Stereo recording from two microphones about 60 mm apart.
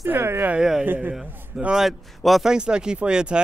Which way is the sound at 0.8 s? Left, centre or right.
Right.